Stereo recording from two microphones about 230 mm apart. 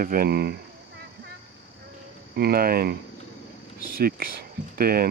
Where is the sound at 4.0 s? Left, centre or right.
Right.